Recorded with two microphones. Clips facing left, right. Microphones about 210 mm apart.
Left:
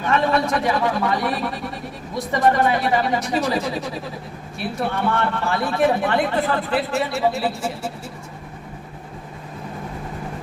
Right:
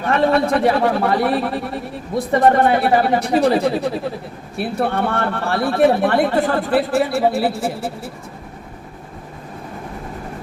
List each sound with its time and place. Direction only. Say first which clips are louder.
0.0 s speech: right 4 dB; 55° right (ahead or behind)